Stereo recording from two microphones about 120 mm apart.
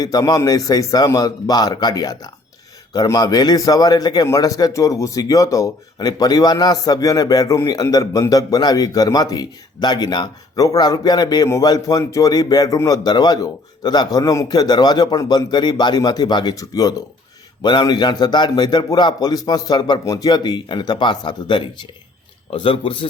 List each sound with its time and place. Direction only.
0.0 s a man's voice: 30° left (ahead or behind)